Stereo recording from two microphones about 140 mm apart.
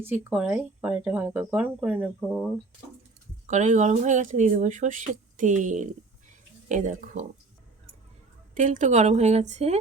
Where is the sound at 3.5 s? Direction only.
60° right (ahead or behind).